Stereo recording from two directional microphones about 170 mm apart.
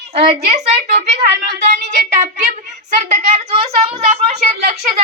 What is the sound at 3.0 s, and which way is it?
A woman's voice, 40° right (ahead or behind).